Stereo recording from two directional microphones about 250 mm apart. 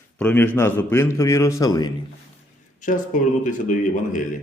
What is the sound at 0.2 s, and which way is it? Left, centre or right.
A man's voice, centre.